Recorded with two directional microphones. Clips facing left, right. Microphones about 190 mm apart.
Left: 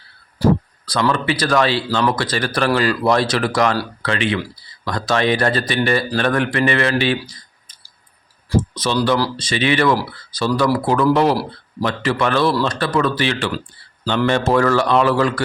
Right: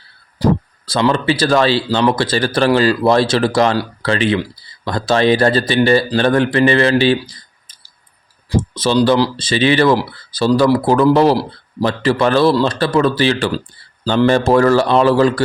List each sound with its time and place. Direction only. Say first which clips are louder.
0.3 s speech: right 1 dB; 20° right (ahead or behind)
8.7 s speech: right 8 dB; 30° right (ahead or behind)